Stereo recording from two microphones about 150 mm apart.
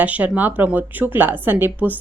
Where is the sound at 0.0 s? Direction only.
10° right (ahead or behind).